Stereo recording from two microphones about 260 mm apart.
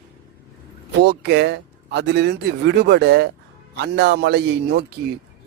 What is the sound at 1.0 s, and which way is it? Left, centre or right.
A man's voice, right.